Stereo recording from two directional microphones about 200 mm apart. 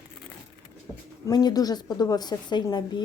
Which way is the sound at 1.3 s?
20° left (ahead or behind).